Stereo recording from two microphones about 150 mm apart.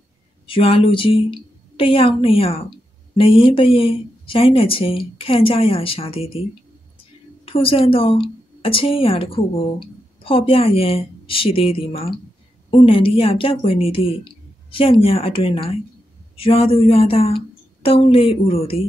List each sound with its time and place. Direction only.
0.5 s a woman's voice: 35° left (ahead or behind)
7.4 s a woman's voice: 40° left (ahead or behind)